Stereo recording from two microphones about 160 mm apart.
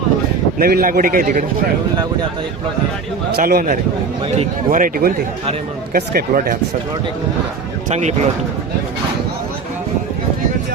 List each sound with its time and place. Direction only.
0.6 s a man's voice: 65° right (ahead or behind)
3.3 s a man's voice: 65° right (ahead or behind)
7.9 s speech: 45° right (ahead or behind)